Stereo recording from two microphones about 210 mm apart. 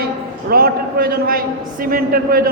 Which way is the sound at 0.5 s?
45° right (ahead or behind).